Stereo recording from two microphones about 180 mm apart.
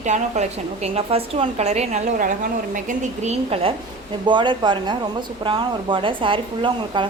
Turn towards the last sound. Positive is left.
turn(degrees=-30)  # may be behind; listen again after turning